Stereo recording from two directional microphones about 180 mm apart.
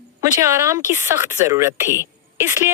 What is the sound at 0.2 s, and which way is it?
A woman's voice, 15° right (ahead or behind).